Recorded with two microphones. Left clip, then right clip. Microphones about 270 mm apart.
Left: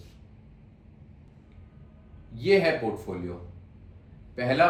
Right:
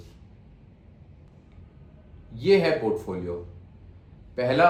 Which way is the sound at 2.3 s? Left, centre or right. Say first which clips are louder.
Right 2 dB; centre.